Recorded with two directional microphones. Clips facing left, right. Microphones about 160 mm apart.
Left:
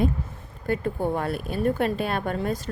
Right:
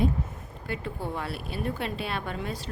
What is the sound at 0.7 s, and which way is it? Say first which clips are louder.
Speech: left 8 dB; 50° left (ahead or behind).